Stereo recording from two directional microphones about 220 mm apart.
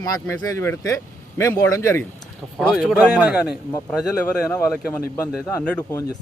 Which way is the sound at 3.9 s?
5° left (ahead or behind).